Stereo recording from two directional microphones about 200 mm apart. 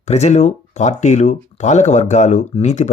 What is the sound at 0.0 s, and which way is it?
Speech, 35° left (ahead or behind).